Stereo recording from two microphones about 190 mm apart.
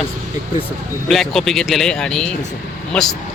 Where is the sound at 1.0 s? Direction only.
Centre (ahead or behind).